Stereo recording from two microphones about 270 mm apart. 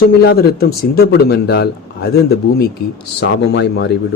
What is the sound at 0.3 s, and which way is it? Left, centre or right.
Speech, left.